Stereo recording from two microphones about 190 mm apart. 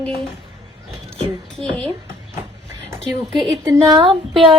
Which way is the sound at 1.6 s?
30° right (ahead or behind).